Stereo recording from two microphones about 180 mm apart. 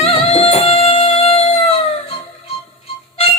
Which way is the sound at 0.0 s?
35° left (ahead or behind).